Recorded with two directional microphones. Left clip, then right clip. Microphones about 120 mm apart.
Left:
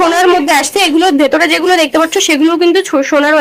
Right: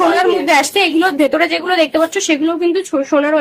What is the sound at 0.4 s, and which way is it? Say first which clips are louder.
A woman's voice: left 2 dB; 30° left (ahead or behind).